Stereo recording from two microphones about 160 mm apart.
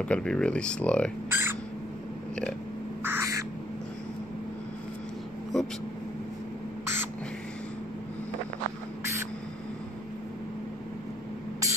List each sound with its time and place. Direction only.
0.0 s speech: 5° left (ahead or behind)
1.3 s a sound: 15° right (ahead or behind)
3.0 s bird: 15° right (ahead or behind)
5.5 s speech: 5° left (ahead or behind)
11.6 s spray: 20° right (ahead or behind)